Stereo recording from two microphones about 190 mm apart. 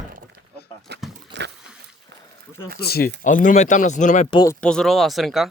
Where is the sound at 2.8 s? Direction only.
55° left (ahead or behind).